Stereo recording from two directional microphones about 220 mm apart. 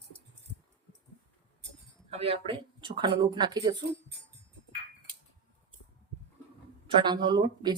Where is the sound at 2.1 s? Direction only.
25° right (ahead or behind).